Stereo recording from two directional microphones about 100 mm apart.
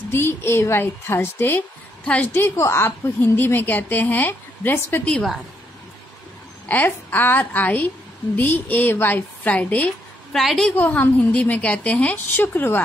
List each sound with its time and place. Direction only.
0.1 s a woman's voice: 25° left (ahead or behind)
5.0 s a woman's voice: 10° left (ahead or behind)
6.7 s a woman's voice: 20° left (ahead or behind)
10.3 s a woman's voice: centre (ahead or behind)
10.8 s a woman's voice: 15° left (ahead or behind)